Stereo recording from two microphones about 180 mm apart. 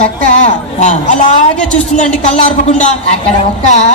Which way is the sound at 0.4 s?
40° left (ahead or behind).